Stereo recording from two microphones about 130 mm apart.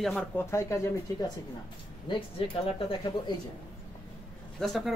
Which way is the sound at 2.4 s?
45° left (ahead or behind).